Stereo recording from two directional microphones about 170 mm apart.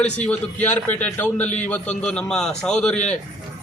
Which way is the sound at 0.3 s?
10° left (ahead or behind).